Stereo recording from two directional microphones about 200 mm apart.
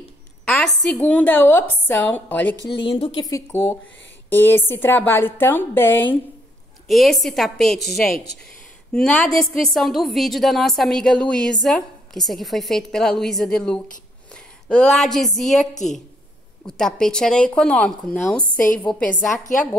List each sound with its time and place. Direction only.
0.9 s a woman's voice: 10° left (ahead or behind)
2.8 s a woman's voice: 30° left (ahead or behind)
3.2 s a woman's voice: 15° left (ahead or behind)
6.9 s a woman's voice: centre (ahead or behind)
15.7 s a woman's voice: 35° left (ahead or behind)
16.6 s a woman's voice: 5° left (ahead or behind)